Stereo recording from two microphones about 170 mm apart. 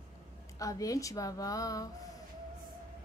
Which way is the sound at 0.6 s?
20° left (ahead or behind).